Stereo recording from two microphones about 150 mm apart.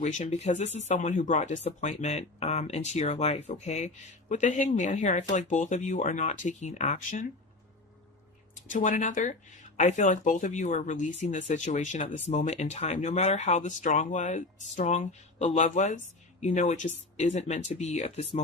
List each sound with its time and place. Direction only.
0.0 s speech: 50° left (ahead or behind)
8.7 s speech: 60° left (ahead or behind)